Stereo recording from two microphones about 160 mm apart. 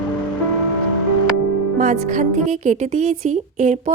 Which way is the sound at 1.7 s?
50° right (ahead or behind).